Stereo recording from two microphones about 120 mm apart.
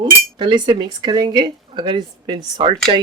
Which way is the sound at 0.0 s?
40° right (ahead or behind).